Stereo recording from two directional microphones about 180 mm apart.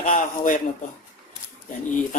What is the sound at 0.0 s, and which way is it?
Speech, 45° left (ahead or behind).